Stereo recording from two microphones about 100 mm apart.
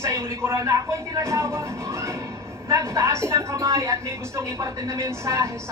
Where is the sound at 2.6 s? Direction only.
30° right (ahead or behind).